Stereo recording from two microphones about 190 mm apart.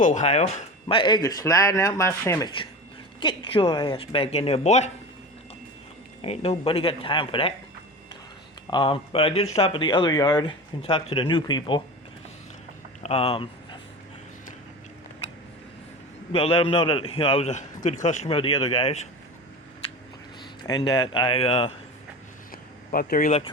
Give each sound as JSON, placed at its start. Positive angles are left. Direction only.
{"t": 0.0, "sound": "speech", "side_deg": 40}
{"t": 3.2, "sound": "speech", "side_deg": 25}
{"t": 6.2, "sound": "speech", "side_deg": 30}
{"t": 8.7, "sound": "speech", "side_deg": 25}
{"t": 13.0, "sound": "speech", "side_deg": 30}
{"t": 16.3, "sound": "a man's voice", "side_deg": 30}
{"t": 20.7, "sound": "speech", "side_deg": 20}
{"t": 22.5, "sound": "a sound", "side_deg": 50}